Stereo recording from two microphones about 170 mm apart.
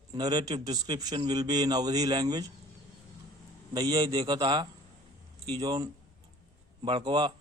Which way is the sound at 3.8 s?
25° right (ahead or behind).